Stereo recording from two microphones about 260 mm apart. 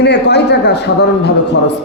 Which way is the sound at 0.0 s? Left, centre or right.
Left.